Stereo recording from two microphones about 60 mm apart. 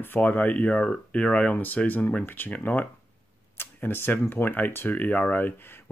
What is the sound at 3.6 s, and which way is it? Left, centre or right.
Speech, left.